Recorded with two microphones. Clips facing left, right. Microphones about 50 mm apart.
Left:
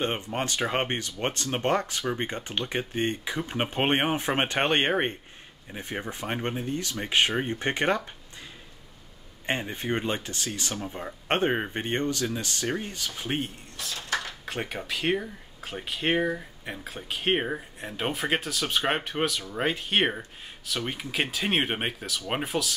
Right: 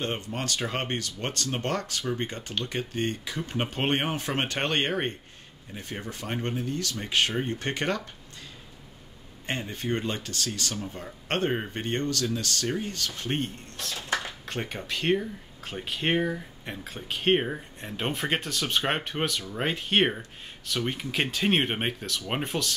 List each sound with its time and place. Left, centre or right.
0.0 s speech: left
9.5 s speech: left; by 13.9 s centre
13.9 s a sound: centre
14.4 s speech: centre